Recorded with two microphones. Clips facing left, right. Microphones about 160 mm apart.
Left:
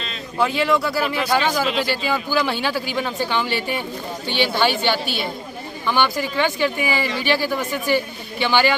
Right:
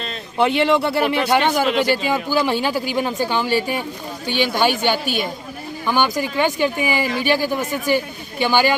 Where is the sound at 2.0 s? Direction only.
15° right (ahead or behind).